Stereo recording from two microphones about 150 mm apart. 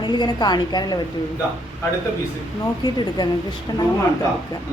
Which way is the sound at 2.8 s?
30° left (ahead or behind).